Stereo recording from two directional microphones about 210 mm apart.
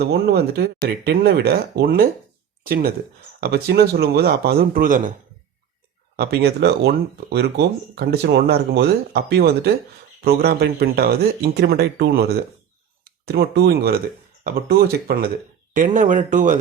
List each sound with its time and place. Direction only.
0.0 s speech: 50° right (ahead or behind)
6.1 s speech: 50° right (ahead or behind)